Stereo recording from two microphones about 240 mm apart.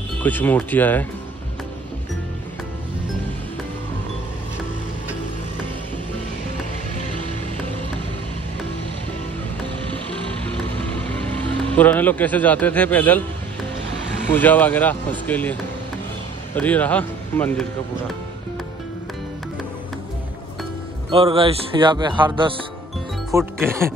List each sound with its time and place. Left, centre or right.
0.2 s speech: centre
11.1 s speech: centre
14.3 s speech: centre
16.5 s speech: centre
21.1 s speech: right